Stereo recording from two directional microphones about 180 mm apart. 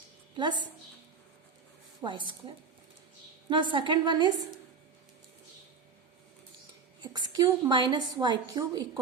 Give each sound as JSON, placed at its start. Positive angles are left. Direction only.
{"t": 0.3, "sound": "a woman's voice", "side_deg": -25}
{"t": 2.0, "sound": "a woman's voice", "side_deg": -25}
{"t": 7.0, "sound": "a woman's voice", "side_deg": -25}